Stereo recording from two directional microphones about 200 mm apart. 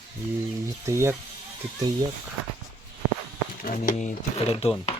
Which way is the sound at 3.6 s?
45° left (ahead or behind).